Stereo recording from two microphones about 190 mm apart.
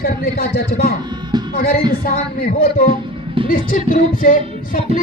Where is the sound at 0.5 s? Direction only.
50° left (ahead or behind).